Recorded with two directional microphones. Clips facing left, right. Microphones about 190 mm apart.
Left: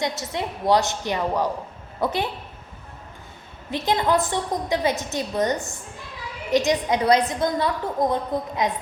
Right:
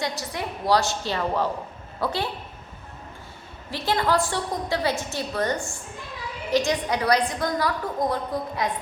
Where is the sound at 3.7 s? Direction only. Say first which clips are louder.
Left 2 dB; 20° left (ahead or behind).